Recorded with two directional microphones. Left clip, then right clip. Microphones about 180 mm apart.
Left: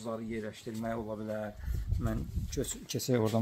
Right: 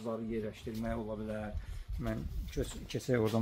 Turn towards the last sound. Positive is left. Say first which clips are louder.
# left 2 dB
turn(degrees=65)  # may be behind; listen again after turning